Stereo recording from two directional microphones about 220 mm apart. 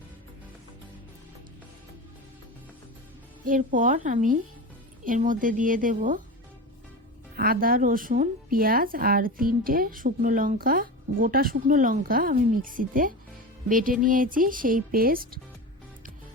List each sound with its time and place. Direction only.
3.4 s speech: 35° right (ahead or behind)
7.3 s speech: 45° right (ahead or behind)